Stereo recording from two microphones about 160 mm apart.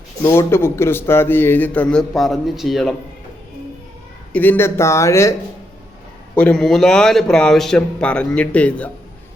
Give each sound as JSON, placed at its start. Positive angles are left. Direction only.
{"t": 0.2, "sound": "speech", "side_deg": 15}
{"t": 4.3, "sound": "speech", "side_deg": 10}
{"t": 6.3, "sound": "a man's voice", "side_deg": 5}